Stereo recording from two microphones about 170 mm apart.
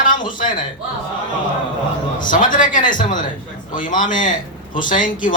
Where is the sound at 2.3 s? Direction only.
50° left (ahead or behind).